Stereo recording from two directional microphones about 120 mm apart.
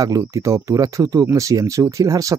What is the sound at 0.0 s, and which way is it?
Speech, 30° right (ahead or behind).